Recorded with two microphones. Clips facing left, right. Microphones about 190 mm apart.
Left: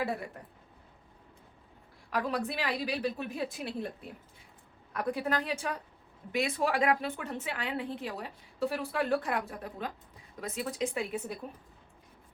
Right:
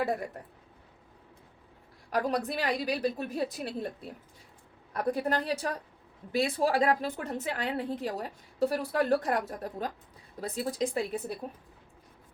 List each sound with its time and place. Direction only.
0.0 s speech: 45° right (ahead or behind)
2.0 s a woman's voice: 40° right (ahead or behind)
4.9 s a woman's voice: 40° right (ahead or behind)